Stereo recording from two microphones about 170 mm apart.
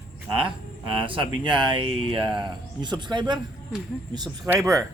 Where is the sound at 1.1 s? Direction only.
30° right (ahead or behind).